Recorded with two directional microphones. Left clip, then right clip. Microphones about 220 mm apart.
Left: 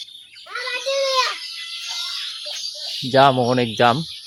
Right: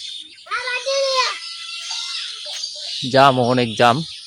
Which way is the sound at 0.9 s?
5° right (ahead or behind).